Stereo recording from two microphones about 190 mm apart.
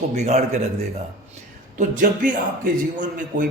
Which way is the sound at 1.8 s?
45° right (ahead or behind).